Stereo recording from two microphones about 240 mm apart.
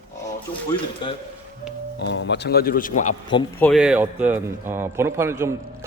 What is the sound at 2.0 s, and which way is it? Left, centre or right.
Speech, left.